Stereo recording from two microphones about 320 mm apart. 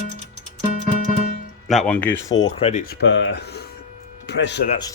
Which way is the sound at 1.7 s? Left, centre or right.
Centre.